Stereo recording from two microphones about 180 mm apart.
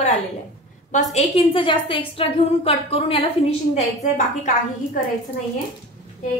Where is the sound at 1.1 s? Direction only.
30° left (ahead or behind).